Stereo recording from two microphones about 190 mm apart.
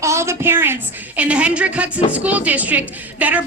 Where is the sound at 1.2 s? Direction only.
5° right (ahead or behind).